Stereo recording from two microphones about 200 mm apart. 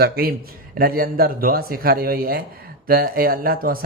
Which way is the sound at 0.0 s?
50° right (ahead or behind).